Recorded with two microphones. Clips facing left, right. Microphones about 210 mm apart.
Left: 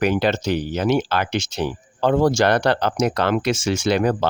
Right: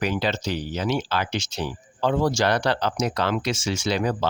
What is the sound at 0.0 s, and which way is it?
Speech, 55° left (ahead or behind).